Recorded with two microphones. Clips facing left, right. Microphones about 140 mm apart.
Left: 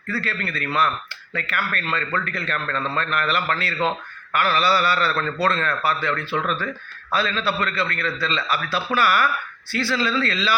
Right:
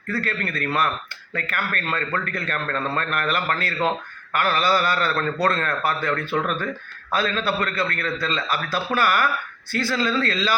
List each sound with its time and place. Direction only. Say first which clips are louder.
0.1 s a man's voice: right 1 dB; 45° right (ahead or behind)